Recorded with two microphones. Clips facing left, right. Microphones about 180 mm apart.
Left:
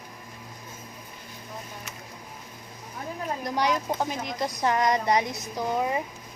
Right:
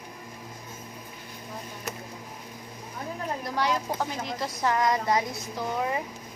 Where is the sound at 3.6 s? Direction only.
15° left (ahead or behind).